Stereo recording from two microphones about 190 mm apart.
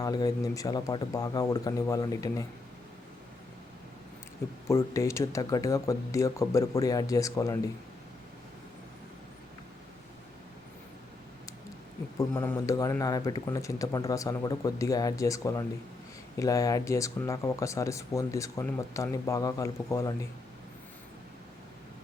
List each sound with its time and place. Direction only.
0.0 s speech: 20° left (ahead or behind)
4.7 s speech: 15° left (ahead or behind)
12.1 s speech: 15° left (ahead or behind)